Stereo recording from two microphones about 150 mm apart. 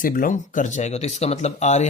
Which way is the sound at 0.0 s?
65° left (ahead or behind).